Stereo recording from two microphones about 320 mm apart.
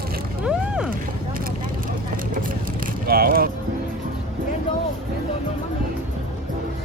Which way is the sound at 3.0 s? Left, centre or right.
Right.